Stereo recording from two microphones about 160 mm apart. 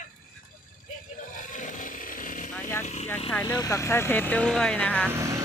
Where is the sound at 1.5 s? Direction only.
55° left (ahead or behind).